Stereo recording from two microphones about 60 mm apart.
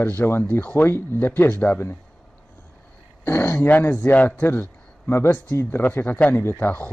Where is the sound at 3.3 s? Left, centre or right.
Left.